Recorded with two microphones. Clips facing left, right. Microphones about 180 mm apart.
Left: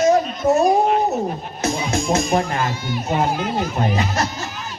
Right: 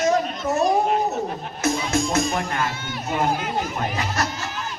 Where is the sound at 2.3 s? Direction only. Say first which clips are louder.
Left 5 dB; 30° left (ahead or behind).